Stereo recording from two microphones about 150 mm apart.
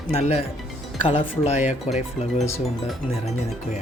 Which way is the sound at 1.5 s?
50° left (ahead or behind).